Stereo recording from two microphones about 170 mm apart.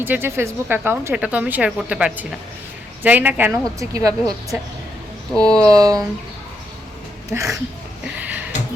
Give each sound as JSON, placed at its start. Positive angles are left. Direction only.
{"t": 0.0, "sound": "speech", "side_deg": -15}
{"t": 5.3, "sound": "speech", "side_deg": 5}
{"t": 5.7, "sound": "speech", "side_deg": -20}
{"t": 7.3, "sound": "speech", "side_deg": -20}
{"t": 8.0, "sound": "a sound", "side_deg": -10}